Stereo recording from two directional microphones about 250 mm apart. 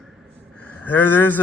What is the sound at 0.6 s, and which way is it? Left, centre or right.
Speech, centre.